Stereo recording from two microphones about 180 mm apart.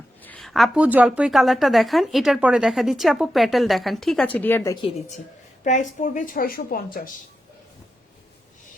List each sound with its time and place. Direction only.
0.2 s a woman's voice: 5° left (ahead or behind)
4.7 s a woman's voice: 30° left (ahead or behind)
5.6 s a woman's voice: 45° left (ahead or behind)